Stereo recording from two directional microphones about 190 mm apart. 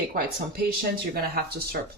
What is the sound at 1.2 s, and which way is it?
Speech, 55° right (ahead or behind).